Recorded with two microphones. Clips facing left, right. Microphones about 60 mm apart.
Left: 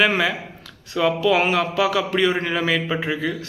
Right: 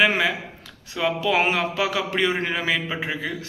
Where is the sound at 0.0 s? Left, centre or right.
Centre.